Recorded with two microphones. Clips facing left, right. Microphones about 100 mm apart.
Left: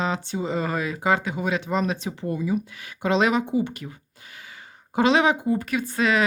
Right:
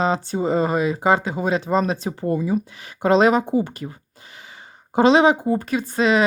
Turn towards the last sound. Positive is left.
turn(degrees=-25)  # may be behind; listen again after turning